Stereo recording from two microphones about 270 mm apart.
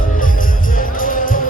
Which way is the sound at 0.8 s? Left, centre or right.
Left.